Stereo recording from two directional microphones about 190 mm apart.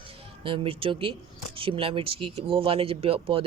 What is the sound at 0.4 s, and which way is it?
Speech, 30° right (ahead or behind).